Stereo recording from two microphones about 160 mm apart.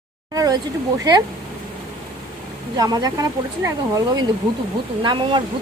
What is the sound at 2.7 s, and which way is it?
Speech, 25° right (ahead or behind).